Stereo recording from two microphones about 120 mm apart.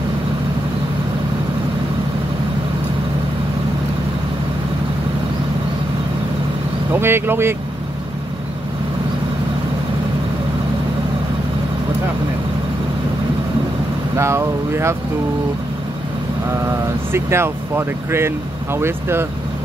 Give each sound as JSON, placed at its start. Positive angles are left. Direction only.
{"t": 6.9, "sound": "speech", "side_deg": -20}
{"t": 14.1, "sound": "speech", "side_deg": -25}
{"t": 16.6, "sound": "speech", "side_deg": -20}